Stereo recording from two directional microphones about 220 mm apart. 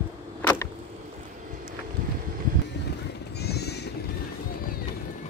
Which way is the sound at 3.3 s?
45° left (ahead or behind).